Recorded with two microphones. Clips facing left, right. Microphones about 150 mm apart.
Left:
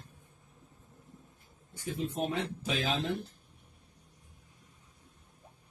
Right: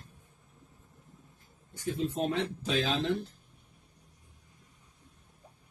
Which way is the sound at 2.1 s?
Centre (ahead or behind).